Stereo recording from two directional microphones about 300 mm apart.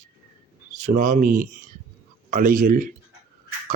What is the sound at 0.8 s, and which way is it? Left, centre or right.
A man's voice, right.